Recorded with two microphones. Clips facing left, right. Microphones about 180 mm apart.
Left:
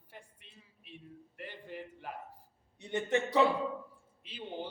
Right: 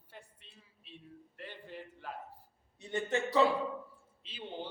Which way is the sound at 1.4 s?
15° left (ahead or behind).